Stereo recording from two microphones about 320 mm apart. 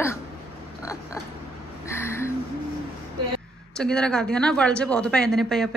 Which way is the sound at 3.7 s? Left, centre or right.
Centre.